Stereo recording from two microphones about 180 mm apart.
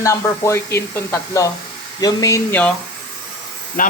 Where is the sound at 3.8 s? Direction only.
50° left (ahead or behind).